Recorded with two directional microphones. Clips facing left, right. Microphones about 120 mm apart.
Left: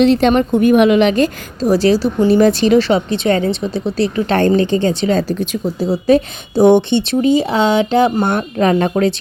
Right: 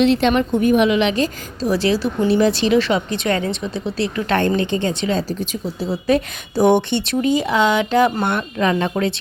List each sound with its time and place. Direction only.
0.0 s speech: 40° left (ahead or behind)
0.6 s a woman's voice: 60° left (ahead or behind); by 5.1 s 35° left (ahead or behind)
5.3 s speech: 60° left (ahead or behind)
5.8 s speech: 35° left (ahead or behind)
8.2 s speech: 40° left (ahead or behind)